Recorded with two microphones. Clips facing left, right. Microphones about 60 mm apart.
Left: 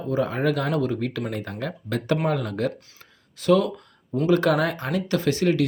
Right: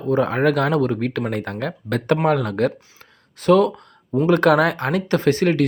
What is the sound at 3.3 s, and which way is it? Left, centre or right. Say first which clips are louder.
Speech: right 5 dB; right.